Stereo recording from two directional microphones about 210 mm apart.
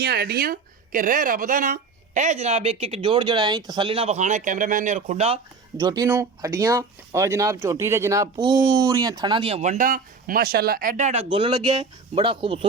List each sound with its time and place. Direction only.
0.0 s a woman's voice: 50° right (ahead or behind); by 5.4 s 30° right (ahead or behind)
5.7 s speech: 15° right (ahead or behind)